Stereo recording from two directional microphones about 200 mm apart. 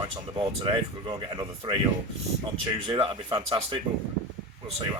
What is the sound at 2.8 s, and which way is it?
Speech, 25° right (ahead or behind).